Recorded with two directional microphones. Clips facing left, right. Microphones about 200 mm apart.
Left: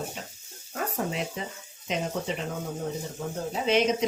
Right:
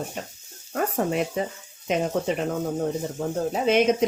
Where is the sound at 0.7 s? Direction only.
50° right (ahead or behind).